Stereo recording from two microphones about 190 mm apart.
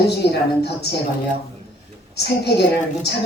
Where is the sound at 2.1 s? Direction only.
60° left (ahead or behind).